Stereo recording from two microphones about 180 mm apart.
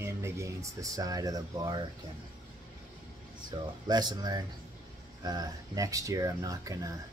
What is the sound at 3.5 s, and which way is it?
Speech, 25° right (ahead or behind).